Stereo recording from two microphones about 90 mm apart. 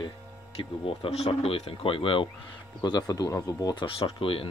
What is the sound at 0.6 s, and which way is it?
Speech, 90° left.